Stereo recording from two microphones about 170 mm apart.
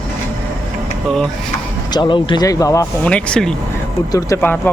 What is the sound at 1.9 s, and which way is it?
Speech, 25° left (ahead or behind).